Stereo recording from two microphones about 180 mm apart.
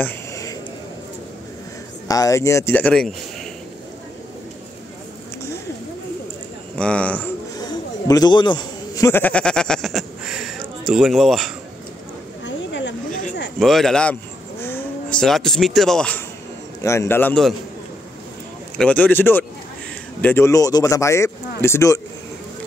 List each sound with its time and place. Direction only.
0.0 s a sound: 20° left (ahead or behind)
2.0 s speech: 20° left (ahead or behind)
6.7 s a man's voice: 5° left (ahead or behind)
7.5 s speech: 20° left (ahead or behind); by 11.5 s centre (ahead or behind)
12.4 s a sound: 80° left
13.6 s speech: centre (ahead or behind)
16.8 s speech: 15° left (ahead or behind)
18.8 s speech: 10° left (ahead or behind)